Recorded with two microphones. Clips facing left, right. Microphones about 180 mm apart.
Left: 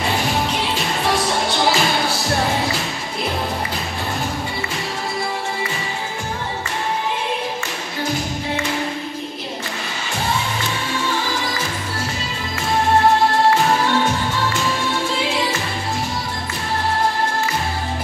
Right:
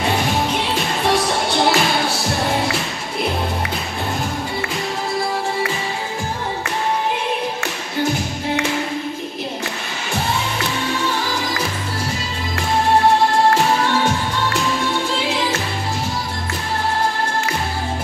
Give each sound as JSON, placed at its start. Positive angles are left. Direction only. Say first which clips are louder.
{"t": 0.3, "sound": "music", "louder": "right 1 dB", "side_deg": 0}